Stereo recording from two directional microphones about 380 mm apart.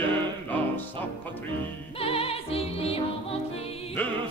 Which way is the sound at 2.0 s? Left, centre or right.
Centre.